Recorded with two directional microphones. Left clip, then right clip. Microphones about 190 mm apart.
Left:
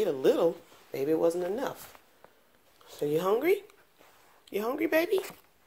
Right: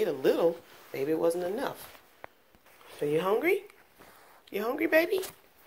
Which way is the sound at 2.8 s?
15° left (ahead or behind).